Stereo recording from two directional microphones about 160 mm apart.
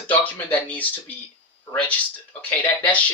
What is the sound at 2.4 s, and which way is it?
Speech, 10° left (ahead or behind).